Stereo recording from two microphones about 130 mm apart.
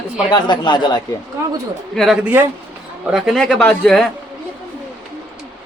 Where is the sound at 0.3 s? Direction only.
35° left (ahead or behind).